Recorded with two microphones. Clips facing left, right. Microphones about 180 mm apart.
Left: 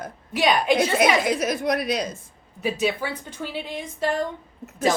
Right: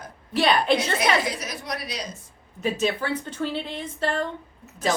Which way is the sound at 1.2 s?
50° left (ahead or behind).